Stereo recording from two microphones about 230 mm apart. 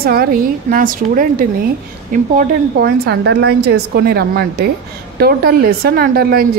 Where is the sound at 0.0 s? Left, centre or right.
Right.